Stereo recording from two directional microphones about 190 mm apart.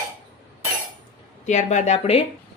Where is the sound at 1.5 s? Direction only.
40° left (ahead or behind).